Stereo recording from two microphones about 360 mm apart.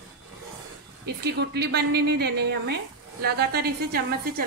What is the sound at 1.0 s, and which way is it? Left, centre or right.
A woman's voice, right.